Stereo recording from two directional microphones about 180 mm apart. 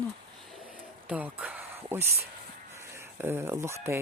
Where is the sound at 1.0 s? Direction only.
10° right (ahead or behind).